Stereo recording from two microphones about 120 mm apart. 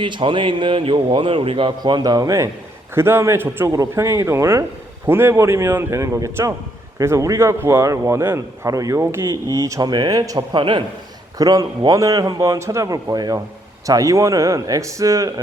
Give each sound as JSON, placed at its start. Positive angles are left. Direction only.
{"t": 0.0, "sound": "a man's voice", "side_deg": -45}
{"t": 10.6, "sound": "a man's voice", "side_deg": -40}